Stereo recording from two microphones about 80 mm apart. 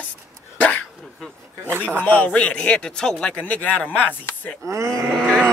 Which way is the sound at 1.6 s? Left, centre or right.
Right.